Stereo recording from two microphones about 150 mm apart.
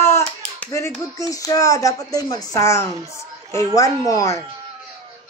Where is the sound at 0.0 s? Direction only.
15° left (ahead or behind).